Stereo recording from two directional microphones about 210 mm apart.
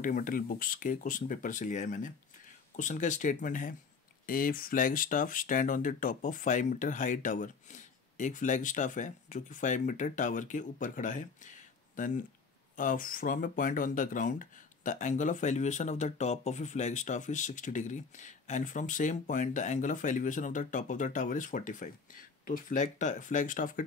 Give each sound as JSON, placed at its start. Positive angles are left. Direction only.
{"t": 0.0, "sound": "speech", "side_deg": 40}
{"t": 12.7, "sound": "speech", "side_deg": 40}